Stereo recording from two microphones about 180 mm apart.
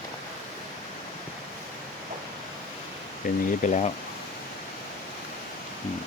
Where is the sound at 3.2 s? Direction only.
50° left (ahead or behind).